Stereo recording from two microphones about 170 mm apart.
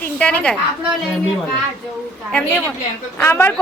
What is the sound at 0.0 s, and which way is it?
Speech, 10° left (ahead or behind).